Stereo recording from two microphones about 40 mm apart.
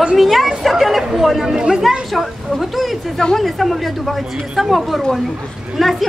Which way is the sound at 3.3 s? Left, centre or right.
Centre.